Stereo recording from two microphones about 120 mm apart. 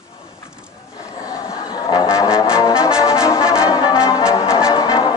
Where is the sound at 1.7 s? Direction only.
30° left (ahead or behind).